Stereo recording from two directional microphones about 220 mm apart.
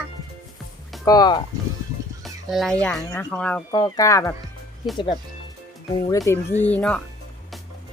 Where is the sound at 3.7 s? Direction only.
15° left (ahead or behind).